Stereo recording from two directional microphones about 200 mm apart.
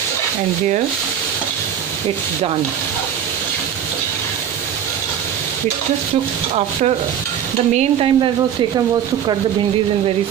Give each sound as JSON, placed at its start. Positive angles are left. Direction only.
{"t": 7.7, "sound": "stir", "side_deg": -30}